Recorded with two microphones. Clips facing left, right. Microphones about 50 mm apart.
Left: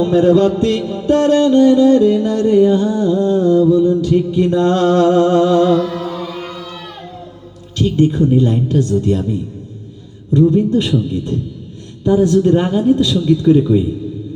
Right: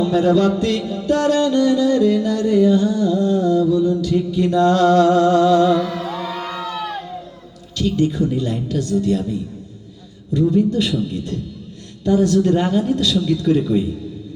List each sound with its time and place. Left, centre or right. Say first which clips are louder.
0.0 s music: left 4 dB; left
7.8 s music: left 4 dB; left
12.0 s a man's voice: left 3 dB; left